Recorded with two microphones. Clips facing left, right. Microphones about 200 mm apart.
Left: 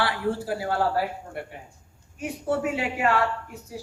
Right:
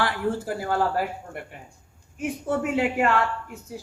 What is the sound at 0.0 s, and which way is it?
Speech, 45° right (ahead or behind).